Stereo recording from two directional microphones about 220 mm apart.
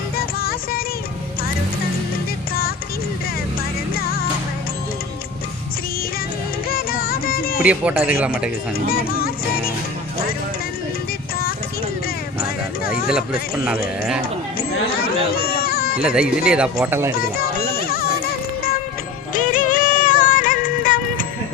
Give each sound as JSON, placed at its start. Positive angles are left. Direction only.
{"t": 0.2, "sound": "music", "side_deg": 45}
{"t": 3.9, "sound": "music", "side_deg": 45}
{"t": 6.7, "sound": "music", "side_deg": 40}
{"t": 7.6, "sound": "speech", "side_deg": -5}
{"t": 8.9, "sound": "speech", "side_deg": 45}
{"t": 15.3, "sound": "a sound", "side_deg": 45}
{"t": 16.0, "sound": "speech", "side_deg": -5}
{"t": 17.7, "sound": "music", "side_deg": 40}
{"t": 19.3, "sound": "music", "side_deg": 35}